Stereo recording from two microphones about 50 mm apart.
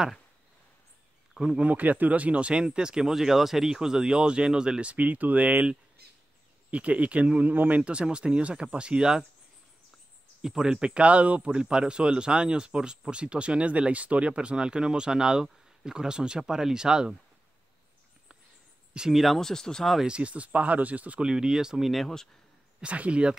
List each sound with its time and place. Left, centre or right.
1.3 s speech: centre
1.6 s speech: right
7.9 s speech: right
10.4 s speech: centre
19.1 s speech: centre
20.1 s speech: right
21.3 s speech: centre
21.9 s speech: centre
22.8 s speech: right